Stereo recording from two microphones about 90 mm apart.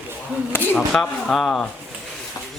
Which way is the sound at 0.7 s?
5° left (ahead or behind).